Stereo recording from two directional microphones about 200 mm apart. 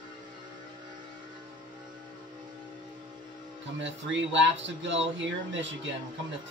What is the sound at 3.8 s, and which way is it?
Speech, 65° right (ahead or behind).